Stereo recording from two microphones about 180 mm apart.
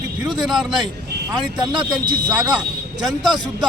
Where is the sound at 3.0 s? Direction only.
Centre (ahead or behind).